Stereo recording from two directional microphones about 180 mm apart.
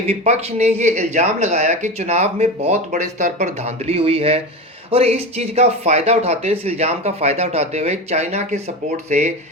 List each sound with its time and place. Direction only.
0.1 s speech: 35° right (ahead or behind)